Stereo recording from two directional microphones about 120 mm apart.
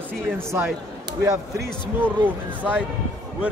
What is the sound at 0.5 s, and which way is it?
Speech, 20° right (ahead or behind).